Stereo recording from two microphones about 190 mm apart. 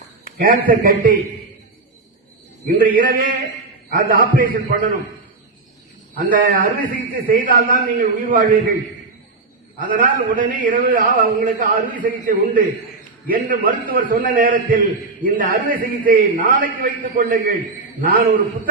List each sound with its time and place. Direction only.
0.3 s a man's voice: 50° right (ahead or behind)
2.6 s a man's voice: 50° right (ahead or behind)
6.1 s a man's voice: 50° right (ahead or behind)
9.9 s a man's voice: 45° right (ahead or behind)